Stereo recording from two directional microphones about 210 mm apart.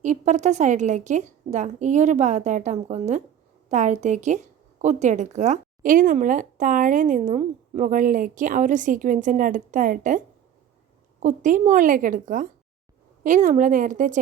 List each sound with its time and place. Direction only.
0.0 s a woman's voice: 35° right (ahead or behind)